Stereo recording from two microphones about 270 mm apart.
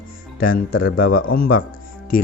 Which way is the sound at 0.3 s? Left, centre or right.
Left.